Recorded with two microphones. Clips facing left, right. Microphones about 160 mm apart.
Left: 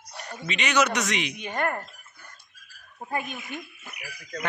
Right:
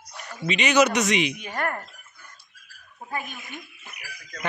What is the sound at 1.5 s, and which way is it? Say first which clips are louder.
Speech: left 6 dB; 20° left (ahead or behind).